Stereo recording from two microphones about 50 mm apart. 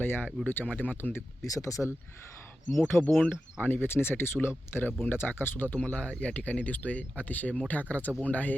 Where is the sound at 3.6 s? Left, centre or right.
Left.